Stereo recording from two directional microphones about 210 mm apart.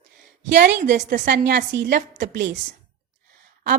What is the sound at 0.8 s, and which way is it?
Speech, 35° right (ahead or behind).